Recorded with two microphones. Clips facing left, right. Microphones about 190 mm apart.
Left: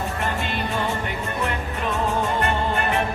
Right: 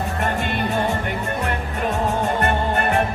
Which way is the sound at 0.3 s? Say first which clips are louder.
Right 3 dB; 55° right (ahead or behind).